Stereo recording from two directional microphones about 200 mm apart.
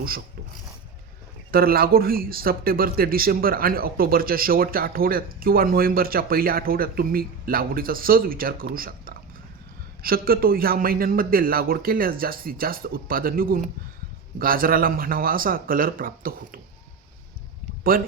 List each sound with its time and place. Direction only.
1.5 s a man's voice: 50° right (ahead or behind)
17.9 s a man's voice: 45° right (ahead or behind)